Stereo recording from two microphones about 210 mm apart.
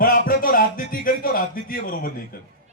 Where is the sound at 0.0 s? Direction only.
40° left (ahead or behind).